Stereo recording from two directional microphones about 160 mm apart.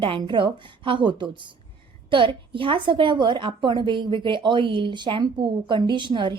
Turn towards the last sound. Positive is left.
turn(degrees=-30)  # may be behind; listen again after turning